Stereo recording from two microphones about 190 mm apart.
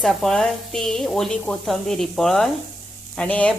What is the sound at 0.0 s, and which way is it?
A woman's voice, centre (ahead or behind).